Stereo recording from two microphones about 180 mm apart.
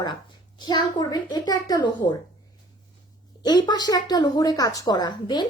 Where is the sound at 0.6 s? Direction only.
25° left (ahead or behind).